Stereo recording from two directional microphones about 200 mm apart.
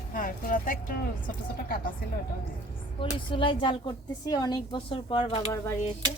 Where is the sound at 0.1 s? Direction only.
45° left (ahead or behind).